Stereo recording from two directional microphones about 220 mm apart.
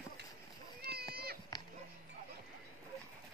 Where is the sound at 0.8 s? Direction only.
45° right (ahead or behind).